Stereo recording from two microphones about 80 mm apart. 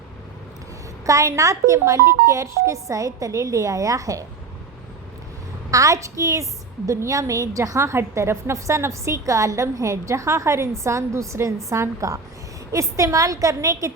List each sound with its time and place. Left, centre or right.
1.0 s speech: right
5.7 s a woman's voice: right